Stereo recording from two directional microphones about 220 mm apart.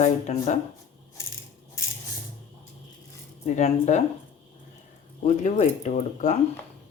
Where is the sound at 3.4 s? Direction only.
30° left (ahead or behind).